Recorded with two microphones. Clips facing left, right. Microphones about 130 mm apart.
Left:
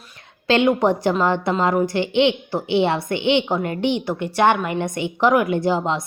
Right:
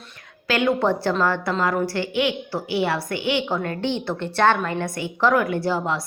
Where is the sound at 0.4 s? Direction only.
25° left (ahead or behind).